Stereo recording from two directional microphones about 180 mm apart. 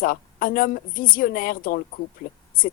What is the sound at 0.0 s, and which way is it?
A woman's voice, 50° left (ahead or behind).